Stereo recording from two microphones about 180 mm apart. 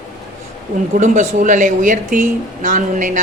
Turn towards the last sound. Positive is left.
turn(degrees=-45)  # may be behind; listen again after turning